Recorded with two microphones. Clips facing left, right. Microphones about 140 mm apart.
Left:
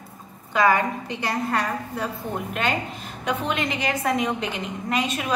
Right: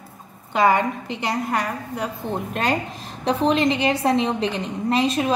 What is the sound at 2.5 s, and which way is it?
A woman's voice, 35° right (ahead or behind).